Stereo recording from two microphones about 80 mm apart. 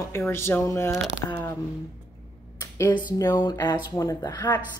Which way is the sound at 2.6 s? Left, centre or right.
Left.